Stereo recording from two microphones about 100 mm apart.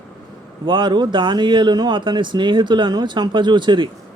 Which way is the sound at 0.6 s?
55° right (ahead or behind).